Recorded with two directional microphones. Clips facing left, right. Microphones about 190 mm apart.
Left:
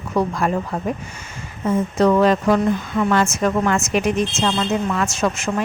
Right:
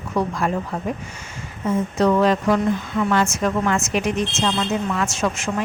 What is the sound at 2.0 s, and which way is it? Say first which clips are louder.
Speech: left 2 dB; 50° left (ahead or behind).